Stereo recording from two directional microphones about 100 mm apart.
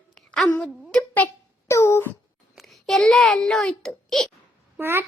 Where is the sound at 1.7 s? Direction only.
25° left (ahead or behind).